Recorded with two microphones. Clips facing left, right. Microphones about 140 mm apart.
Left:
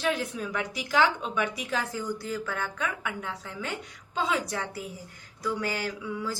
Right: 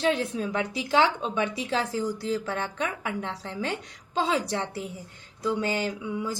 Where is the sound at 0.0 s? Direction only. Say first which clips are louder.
Right 4 dB; 25° right (ahead or behind).